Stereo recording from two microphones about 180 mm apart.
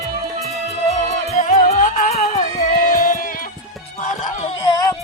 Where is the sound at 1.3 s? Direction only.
40° left (ahead or behind).